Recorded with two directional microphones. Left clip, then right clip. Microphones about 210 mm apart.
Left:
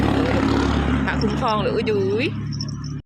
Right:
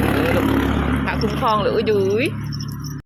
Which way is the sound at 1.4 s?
5° right (ahead or behind).